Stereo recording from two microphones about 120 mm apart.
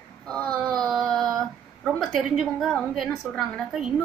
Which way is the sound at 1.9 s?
Centre (ahead or behind).